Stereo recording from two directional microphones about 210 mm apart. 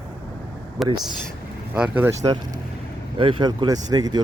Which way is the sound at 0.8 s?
Centre (ahead or behind).